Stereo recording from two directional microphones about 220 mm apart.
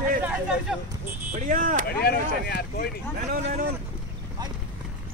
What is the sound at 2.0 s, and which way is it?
Speech, 45° left (ahead or behind).